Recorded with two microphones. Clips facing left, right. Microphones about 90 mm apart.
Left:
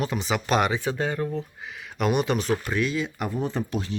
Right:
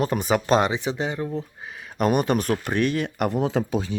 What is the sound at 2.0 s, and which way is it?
Speech, 45° right (ahead or behind).